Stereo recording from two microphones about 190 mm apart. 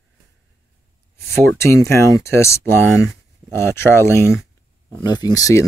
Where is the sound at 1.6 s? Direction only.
15° left (ahead or behind).